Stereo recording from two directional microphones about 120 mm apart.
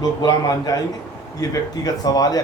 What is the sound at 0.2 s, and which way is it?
A man's voice, 35° left (ahead or behind).